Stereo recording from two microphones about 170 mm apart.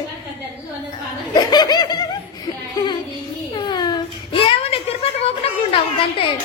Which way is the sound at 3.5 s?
25° left (ahead or behind).